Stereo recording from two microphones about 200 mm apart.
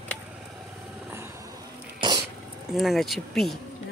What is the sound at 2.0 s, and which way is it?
Dog, 20° right (ahead or behind).